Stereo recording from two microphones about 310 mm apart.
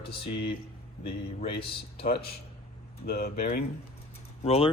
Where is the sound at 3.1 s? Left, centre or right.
Left.